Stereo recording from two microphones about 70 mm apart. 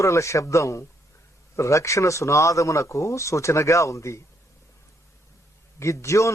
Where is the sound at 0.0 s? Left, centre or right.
Left.